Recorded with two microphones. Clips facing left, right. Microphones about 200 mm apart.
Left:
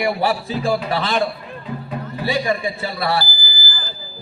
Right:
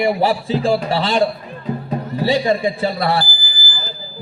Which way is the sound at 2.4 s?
25° right (ahead or behind).